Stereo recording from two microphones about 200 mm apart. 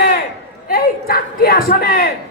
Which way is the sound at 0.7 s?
50° left (ahead or behind).